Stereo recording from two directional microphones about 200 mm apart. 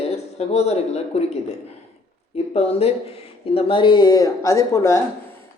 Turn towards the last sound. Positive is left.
turn(degrees=15)  # may be behind; listen again after turning